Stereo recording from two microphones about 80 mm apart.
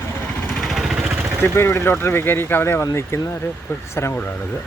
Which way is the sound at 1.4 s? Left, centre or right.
Left.